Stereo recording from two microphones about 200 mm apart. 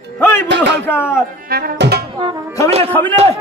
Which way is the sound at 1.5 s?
50° right (ahead or behind).